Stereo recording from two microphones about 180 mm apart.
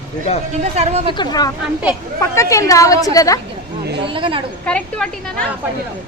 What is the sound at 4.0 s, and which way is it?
Speech, 30° right (ahead or behind).